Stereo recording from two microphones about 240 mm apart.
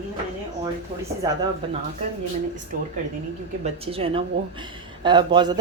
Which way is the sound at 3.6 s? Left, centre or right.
Right.